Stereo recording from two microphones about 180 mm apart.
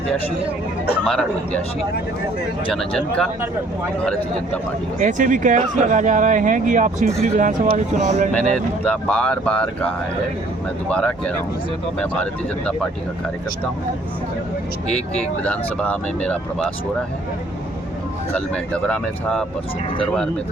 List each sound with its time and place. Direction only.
1.0 s speech: 5° left (ahead or behind)
2.7 s speech: 5° left (ahead or behind)
4.9 s speech: 45° right (ahead or behind)
8.3 s speech: 5° left (ahead or behind)
14.9 s speech: 35° left (ahead or behind)
15.4 s speech: 5° left (ahead or behind)
18.3 s speech: 5° left (ahead or behind)